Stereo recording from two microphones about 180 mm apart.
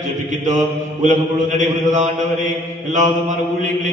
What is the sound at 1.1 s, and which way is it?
A man's voice, 45° right (ahead or behind).